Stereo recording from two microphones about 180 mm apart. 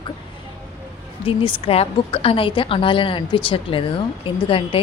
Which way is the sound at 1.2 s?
30° left (ahead or behind).